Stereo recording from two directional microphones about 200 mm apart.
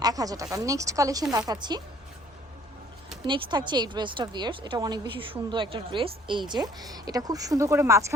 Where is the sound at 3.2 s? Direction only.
20° right (ahead or behind).